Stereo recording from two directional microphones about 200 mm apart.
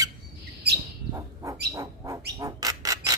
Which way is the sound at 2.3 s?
20° right (ahead or behind).